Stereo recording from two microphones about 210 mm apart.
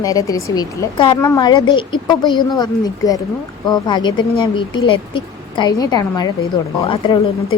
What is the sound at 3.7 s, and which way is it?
A woman's voice, 20° left (ahead or behind).